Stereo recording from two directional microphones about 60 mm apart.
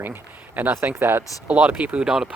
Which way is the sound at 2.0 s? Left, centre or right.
Centre.